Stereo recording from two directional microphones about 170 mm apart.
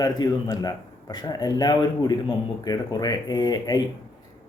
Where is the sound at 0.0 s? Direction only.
25° left (ahead or behind).